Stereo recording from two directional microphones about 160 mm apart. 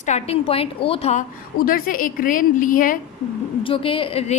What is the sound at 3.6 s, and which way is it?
Speech, 35° left (ahead or behind).